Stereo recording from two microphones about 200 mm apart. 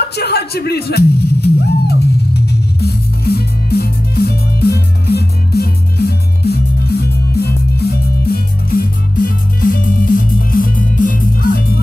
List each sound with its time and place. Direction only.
0.1 s music: 55° left (ahead or behind)